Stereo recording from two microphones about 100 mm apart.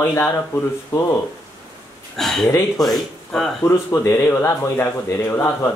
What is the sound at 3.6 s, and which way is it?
Speech, 30° left (ahead or behind).